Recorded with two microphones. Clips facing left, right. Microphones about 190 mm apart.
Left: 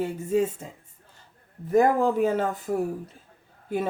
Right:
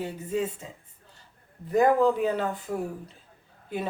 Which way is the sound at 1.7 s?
45° left (ahead or behind).